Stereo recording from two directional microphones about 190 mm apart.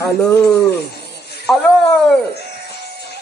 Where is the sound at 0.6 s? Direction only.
60° left (ahead or behind).